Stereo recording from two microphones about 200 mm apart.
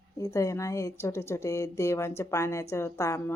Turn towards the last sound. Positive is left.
turn(degrees=15)  # may be behind; listen again after turning